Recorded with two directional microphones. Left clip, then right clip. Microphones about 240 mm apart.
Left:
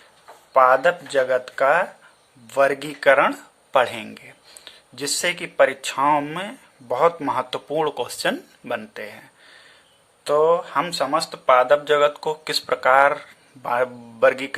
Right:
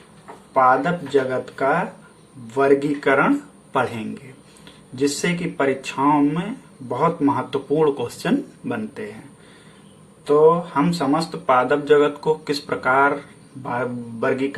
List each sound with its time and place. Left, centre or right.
0.5 s speech: left
10.2 s speech: left